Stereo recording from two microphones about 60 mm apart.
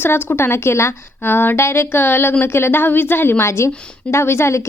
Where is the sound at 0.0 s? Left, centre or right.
Left.